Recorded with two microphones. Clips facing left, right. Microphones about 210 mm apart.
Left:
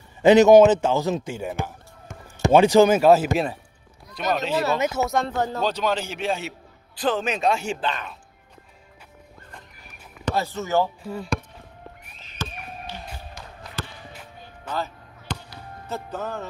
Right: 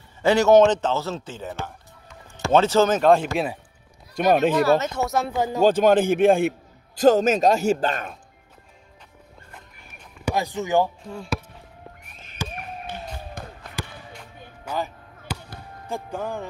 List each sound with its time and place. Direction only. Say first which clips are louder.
0.2 s a man's voice: left 3 dB; 20° left (ahead or behind)
4.1 s speech: right 6 dB; 50° right (ahead or behind)
4.6 s speech: right 2 dB; 10° left (ahead or behind); by 5.6 s 10° right (ahead or behind)
5.6 s speech: right 13 dB; 50° right (ahead or behind)
7.0 s a man's voice: right 7 dB; 40° right (ahead or behind)
10.2 s speech: right 1 dB; 15° right (ahead or behind)
11.1 s speech: left 2 dB; centre (ahead or behind)
12.4 s basketball bounce: right 1 dB; 10° right (ahead or behind)
12.8 s a sound: right 3 dB; 55° right (ahead or behind)
13.8 s basketball bounce: right 1 dB; 10° right (ahead or behind)
14.6 s a sound: right 1 dB; 10° right (ahead or behind)
15.9 s speech: right 1 dB; 10° right (ahead or behind)